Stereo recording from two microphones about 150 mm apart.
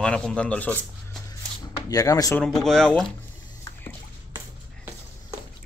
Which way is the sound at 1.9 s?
25° left (ahead or behind).